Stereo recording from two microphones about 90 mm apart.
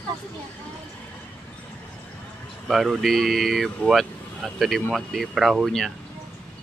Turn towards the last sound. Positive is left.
turn(degrees=5)  # may be behind; listen again after turning